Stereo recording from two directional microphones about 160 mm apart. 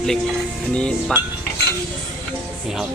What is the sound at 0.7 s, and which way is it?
Speech, 5° left (ahead or behind).